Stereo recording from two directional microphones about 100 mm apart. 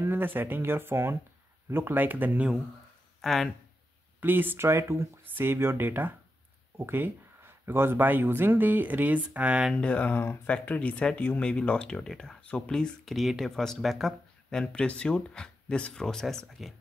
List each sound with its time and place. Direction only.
0.0 s speech: 20° right (ahead or behind)
3.2 s speech: centre (ahead or behind)
4.2 s speech: 20° right (ahead or behind)
9.8 s speech: 10° left (ahead or behind)